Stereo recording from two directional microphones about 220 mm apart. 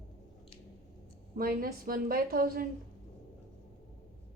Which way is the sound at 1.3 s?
40° right (ahead or behind).